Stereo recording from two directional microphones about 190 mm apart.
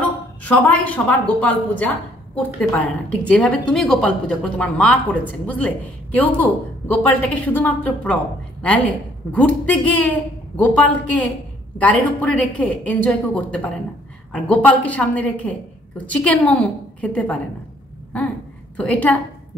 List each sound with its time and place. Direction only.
0.0 s a woman's voice: 10° left (ahead or behind)
9.3 s a woman's voice: 5° left (ahead or behind)
18.8 s a woman's voice: 5° left (ahead or behind)